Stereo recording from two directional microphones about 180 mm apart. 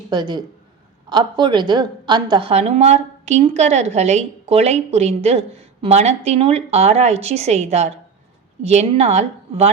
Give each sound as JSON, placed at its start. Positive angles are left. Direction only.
{"t": 0.1, "sound": "a woman's voice", "side_deg": -25}